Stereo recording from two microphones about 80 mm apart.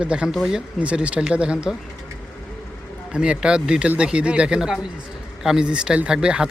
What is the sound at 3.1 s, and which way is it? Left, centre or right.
Speech, centre.